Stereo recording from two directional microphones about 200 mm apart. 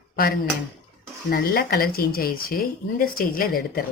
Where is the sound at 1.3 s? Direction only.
50° left (ahead or behind).